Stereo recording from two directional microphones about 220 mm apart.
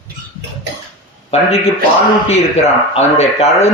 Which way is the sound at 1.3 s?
30° left (ahead or behind).